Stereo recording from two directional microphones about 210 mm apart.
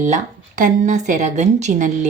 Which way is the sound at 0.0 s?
35° right (ahead or behind).